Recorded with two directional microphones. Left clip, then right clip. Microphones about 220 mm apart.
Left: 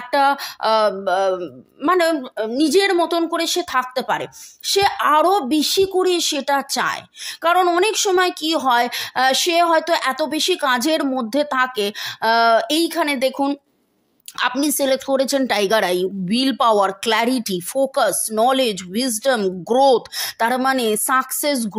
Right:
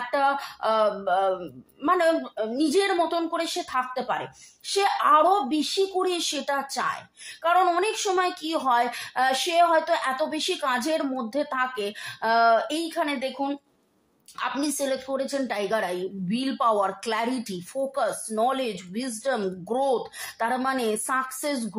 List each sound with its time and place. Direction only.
0.1 s a woman's voice: 40° left (ahead or behind)